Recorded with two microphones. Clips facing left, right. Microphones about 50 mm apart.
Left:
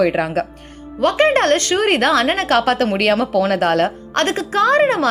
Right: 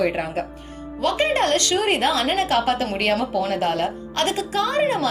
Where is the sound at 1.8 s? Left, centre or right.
Left.